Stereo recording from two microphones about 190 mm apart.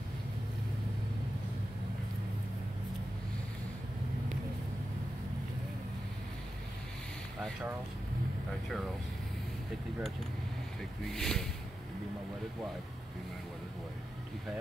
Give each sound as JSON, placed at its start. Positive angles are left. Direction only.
{"t": 11.1, "sound": "speech", "side_deg": 5}